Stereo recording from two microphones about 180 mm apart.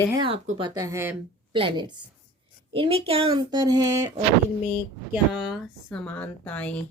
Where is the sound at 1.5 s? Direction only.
25° right (ahead or behind).